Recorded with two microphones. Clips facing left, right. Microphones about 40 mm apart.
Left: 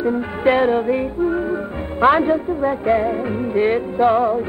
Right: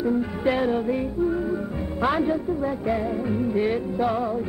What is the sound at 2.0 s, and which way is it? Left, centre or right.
Music, left.